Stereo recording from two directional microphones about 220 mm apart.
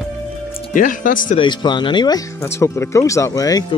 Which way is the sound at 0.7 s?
35° left (ahead or behind).